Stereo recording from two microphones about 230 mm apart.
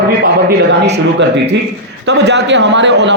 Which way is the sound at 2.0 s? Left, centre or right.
Right.